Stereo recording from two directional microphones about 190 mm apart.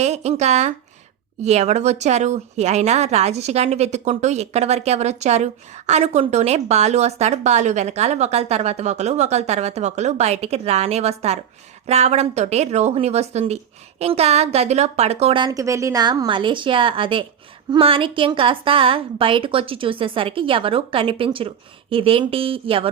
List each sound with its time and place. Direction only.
0.0 s a woman's voice: 35° right (ahead or behind)